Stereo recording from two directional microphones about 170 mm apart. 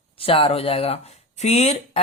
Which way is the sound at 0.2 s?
30° left (ahead or behind).